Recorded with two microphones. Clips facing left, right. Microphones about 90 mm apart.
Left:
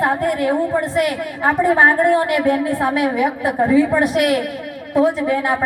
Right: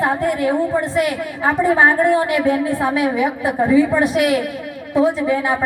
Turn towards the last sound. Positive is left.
turn(degrees=55)  # may be behind; listen again after turning